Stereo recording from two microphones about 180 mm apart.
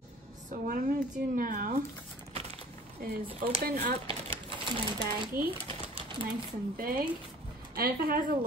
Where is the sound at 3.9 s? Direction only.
30° right (ahead or behind).